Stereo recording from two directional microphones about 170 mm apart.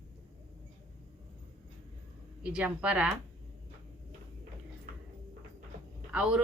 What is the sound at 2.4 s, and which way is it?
Speech, 5° right (ahead or behind).